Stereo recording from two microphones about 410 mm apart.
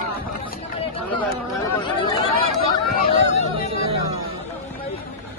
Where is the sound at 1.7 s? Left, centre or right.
Centre.